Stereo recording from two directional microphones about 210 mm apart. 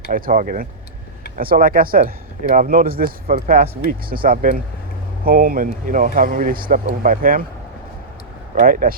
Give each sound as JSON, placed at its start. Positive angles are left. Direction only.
{"t": 0.1, "sound": "a man's voice", "side_deg": -40}
{"t": 8.5, "sound": "speech", "side_deg": -40}